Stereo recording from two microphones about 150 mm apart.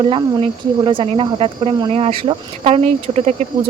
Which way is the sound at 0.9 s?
35° right (ahead or behind).